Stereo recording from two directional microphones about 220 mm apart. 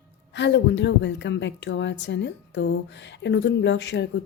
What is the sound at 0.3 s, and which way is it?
Speech, 55° left (ahead or behind).